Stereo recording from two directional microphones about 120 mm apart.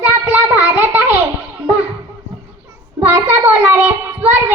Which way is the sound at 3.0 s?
20° right (ahead or behind).